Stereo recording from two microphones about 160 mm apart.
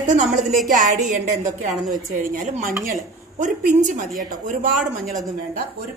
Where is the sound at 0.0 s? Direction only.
50° right (ahead or behind).